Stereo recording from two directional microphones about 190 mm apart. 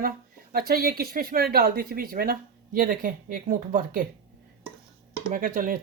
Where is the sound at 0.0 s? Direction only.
50° right (ahead or behind).